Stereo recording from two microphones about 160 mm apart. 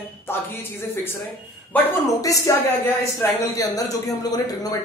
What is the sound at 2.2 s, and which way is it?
Speech, 20° left (ahead or behind).